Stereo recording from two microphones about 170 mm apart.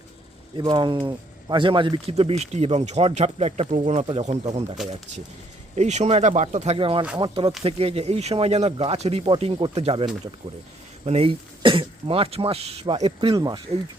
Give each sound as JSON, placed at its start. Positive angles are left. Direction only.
{"t": 0.5, "sound": "speech", "side_deg": -25}